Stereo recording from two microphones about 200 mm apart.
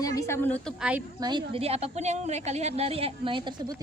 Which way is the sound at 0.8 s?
5° right (ahead or behind).